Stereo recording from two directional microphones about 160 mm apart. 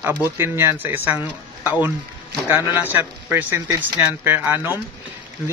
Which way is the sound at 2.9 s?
10° right (ahead or behind).